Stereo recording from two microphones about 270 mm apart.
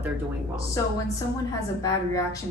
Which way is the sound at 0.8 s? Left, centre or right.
Centre.